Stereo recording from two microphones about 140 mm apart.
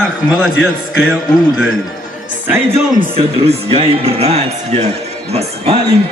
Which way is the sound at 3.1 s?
40° right (ahead or behind).